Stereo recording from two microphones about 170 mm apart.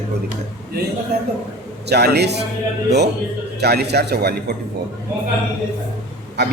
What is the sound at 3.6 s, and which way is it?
Speech, 75° right (ahead or behind).